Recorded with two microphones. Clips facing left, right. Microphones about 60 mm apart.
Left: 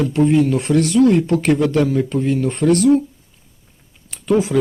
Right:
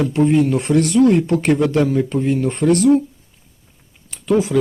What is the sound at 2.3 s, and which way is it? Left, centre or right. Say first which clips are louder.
Speech: even; right.